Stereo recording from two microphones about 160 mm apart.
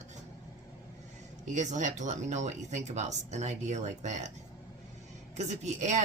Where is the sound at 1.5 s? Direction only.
50° right (ahead or behind).